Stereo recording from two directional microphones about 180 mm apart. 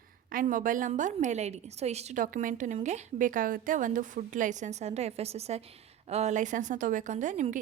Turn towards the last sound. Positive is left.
turn(degrees=-45)  # may be behind; listen again after turning